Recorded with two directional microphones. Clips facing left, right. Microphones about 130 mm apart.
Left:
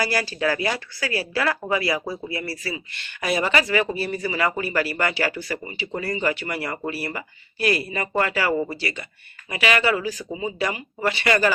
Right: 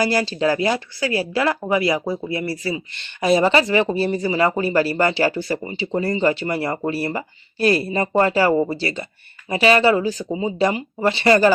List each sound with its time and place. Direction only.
0.0 s speech: 20° right (ahead or behind)